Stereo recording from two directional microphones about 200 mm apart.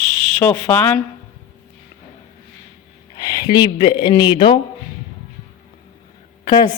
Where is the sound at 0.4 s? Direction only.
10° left (ahead or behind).